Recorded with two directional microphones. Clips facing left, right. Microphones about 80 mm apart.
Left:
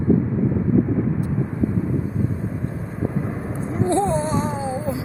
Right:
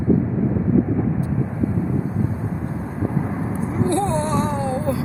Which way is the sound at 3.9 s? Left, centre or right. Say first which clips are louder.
Left 2 dB; centre.